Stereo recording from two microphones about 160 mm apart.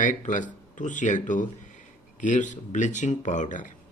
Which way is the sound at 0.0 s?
50° left (ahead or behind).